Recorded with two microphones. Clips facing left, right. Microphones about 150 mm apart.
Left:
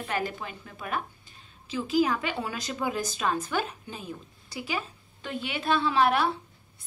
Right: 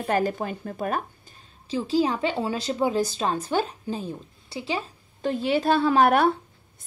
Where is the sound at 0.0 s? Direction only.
40° right (ahead or behind).